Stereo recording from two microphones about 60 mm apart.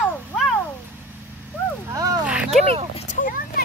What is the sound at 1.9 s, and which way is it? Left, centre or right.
Speech, right.